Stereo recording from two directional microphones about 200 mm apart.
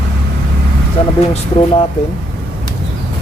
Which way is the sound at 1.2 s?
30° left (ahead or behind).